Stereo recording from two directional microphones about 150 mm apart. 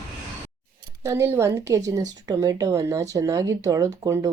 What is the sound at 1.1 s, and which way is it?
Speech, 15° right (ahead or behind).